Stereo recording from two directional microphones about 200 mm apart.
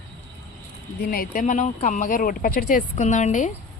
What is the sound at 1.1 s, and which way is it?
Speech, 45° left (ahead or behind).